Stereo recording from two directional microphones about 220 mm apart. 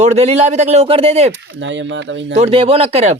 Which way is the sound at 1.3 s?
55° right (ahead or behind).